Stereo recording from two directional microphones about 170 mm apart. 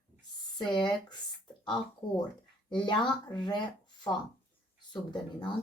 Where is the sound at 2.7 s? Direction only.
25° left (ahead or behind).